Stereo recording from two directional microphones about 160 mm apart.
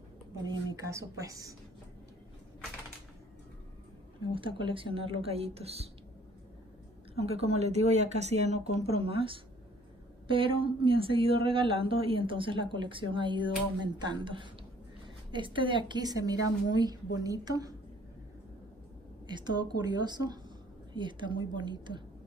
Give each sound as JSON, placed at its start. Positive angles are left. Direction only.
{"t": 0.5, "sound": "a woman's voice", "side_deg": -25}
{"t": 4.2, "sound": "speech", "side_deg": -30}
{"t": 7.2, "sound": "a woman's voice", "side_deg": -40}
{"t": 19.2, "sound": "a woman's voice", "side_deg": -25}